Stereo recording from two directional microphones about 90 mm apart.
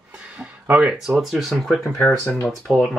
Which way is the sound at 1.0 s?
Centre (ahead or behind).